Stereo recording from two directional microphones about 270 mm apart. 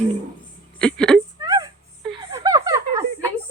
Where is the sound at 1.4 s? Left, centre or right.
Centre.